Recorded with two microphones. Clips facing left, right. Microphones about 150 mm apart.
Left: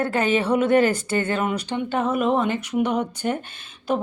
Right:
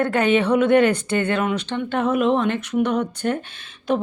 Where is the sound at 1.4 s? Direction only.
10° left (ahead or behind).